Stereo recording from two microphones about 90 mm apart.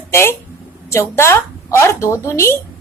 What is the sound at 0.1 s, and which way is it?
A woman's voice, 30° left (ahead or behind).